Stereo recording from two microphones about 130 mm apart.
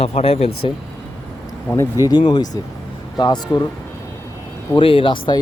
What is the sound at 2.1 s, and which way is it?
Speech, 35° left (ahead or behind).